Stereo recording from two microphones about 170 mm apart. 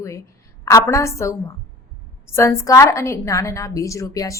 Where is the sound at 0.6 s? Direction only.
20° left (ahead or behind).